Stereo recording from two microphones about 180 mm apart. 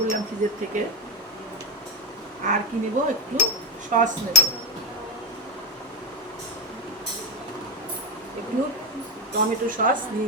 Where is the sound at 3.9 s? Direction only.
45° right (ahead or behind).